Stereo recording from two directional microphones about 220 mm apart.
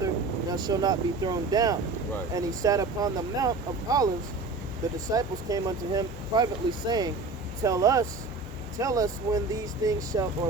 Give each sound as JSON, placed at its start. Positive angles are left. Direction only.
{"t": 0.5, "sound": "speech", "side_deg": -20}